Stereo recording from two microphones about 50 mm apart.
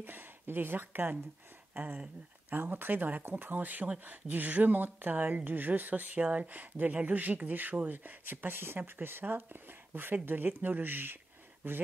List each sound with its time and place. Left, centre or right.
0.0 s speech: right
1.7 s a sound: right
2.5 s speech: right